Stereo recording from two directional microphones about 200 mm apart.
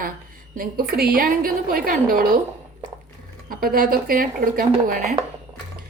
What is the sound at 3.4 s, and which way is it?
A woman's voice, 45° right (ahead or behind).